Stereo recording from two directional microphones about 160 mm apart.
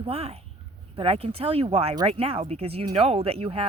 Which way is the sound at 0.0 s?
40° right (ahead or behind).